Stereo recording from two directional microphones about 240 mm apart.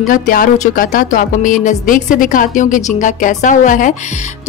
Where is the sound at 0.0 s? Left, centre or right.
Left.